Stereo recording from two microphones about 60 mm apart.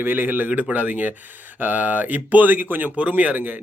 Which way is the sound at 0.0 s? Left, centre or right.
Right.